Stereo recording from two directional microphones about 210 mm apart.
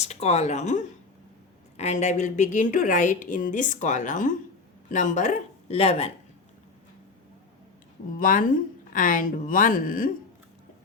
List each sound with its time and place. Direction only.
0.0 s a woman's voice: 30° left (ahead or behind)
8.2 s a woman's voice: 40° left (ahead or behind)